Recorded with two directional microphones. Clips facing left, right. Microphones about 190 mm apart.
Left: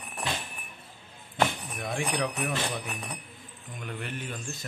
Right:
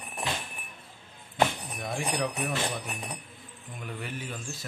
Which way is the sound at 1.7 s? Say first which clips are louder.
Left 1 dB; centre (ahead or behind).